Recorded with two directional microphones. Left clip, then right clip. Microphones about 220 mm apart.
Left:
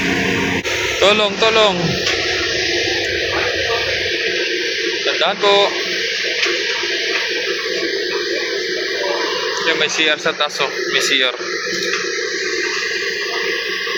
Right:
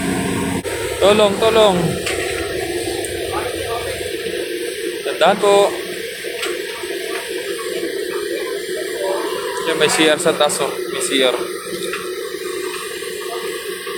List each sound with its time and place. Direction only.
1.0 s speech: 10° right (ahead or behind)
5.2 s speech: 15° right (ahead or behind)
9.6 s speech: 20° right (ahead or behind)